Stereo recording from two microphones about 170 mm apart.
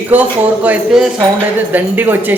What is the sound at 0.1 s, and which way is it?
Speech, 10° right (ahead or behind).